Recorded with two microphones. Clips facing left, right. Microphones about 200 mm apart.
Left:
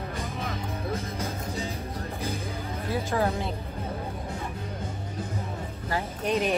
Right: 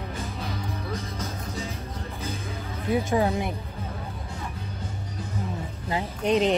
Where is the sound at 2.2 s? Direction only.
15° left (ahead or behind).